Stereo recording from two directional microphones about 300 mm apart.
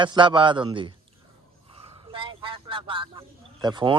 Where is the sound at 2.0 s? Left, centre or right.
Centre.